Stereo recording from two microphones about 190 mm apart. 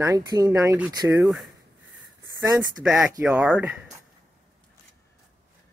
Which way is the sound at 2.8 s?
Centre (ahead or behind).